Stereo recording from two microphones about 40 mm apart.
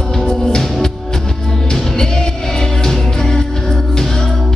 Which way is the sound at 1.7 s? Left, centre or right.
Centre.